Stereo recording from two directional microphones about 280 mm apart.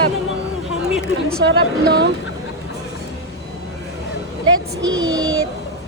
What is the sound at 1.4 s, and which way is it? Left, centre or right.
Speech, right.